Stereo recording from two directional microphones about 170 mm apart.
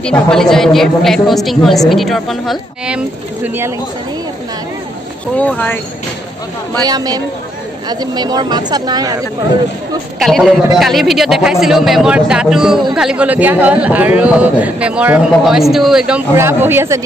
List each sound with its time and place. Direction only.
0.0 s a woman's voice: 5° left (ahead or behind)
5.4 s speech: 10° left (ahead or behind)
6.8 s speech: 20° right (ahead or behind)
10.1 s a woman's voice: centre (ahead or behind)
16.3 s a man's voice: 15° right (ahead or behind)